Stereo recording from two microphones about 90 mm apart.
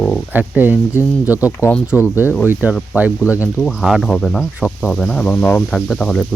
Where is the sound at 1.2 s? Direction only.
20° right (ahead or behind).